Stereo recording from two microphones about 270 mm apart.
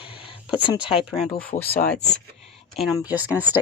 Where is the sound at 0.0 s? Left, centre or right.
Centre.